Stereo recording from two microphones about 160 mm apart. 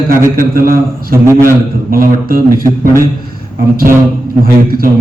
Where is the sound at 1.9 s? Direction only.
65° right (ahead or behind).